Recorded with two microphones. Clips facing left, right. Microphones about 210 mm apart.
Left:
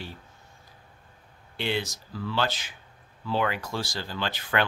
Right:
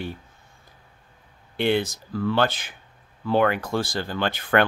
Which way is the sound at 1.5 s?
55° right (ahead or behind).